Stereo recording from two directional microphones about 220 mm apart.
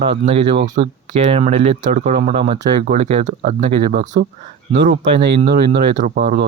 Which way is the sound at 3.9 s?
40° right (ahead or behind).